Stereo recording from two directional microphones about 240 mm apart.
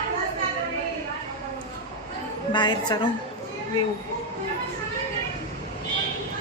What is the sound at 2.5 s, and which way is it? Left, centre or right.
Speech, centre.